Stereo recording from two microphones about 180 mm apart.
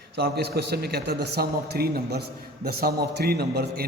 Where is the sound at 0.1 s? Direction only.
65° right (ahead or behind).